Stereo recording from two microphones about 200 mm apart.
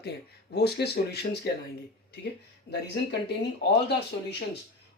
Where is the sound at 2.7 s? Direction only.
60° left (ahead or behind).